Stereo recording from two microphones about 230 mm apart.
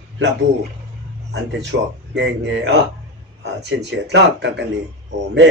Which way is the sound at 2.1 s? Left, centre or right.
Right.